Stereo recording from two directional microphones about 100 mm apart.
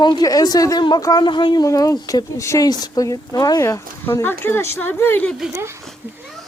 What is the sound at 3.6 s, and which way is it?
Speech, 30° left (ahead or behind).